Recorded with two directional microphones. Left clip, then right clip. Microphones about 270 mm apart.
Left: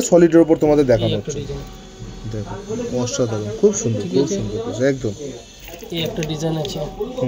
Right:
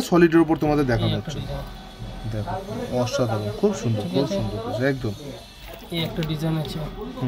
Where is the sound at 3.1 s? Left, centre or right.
Centre.